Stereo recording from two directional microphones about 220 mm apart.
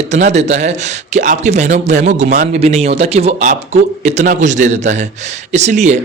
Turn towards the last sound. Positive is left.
turn(degrees=-30)  # may be behind; listen again after turning